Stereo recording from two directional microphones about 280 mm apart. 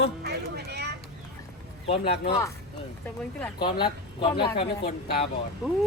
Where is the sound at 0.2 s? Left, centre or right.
Right.